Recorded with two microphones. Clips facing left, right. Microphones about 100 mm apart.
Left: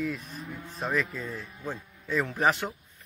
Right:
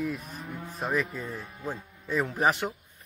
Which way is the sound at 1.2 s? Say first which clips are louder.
Even; 30° right (ahead or behind).